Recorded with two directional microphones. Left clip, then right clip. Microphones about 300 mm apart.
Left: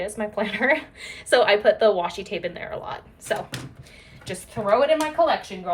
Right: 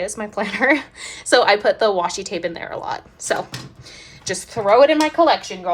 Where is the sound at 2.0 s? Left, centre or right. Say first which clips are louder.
Right 5 dB; right.